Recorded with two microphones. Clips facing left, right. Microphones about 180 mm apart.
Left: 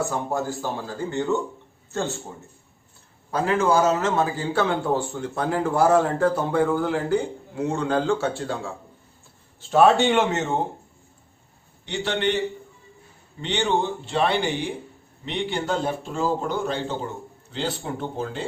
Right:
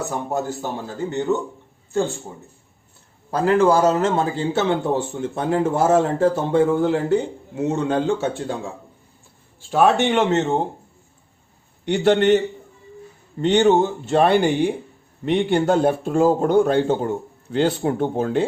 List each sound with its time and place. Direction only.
0.0 s speech: 20° right (ahead or behind)
3.4 s speech: 35° right (ahead or behind); by 8.7 s 20° right (ahead or behind)
9.7 s speech: 20° right (ahead or behind)
11.9 s a man's voice: 50° right (ahead or behind)
13.4 s a man's voice: 45° right (ahead or behind)